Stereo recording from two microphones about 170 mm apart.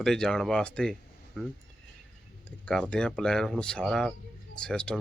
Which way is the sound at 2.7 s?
5° left (ahead or behind).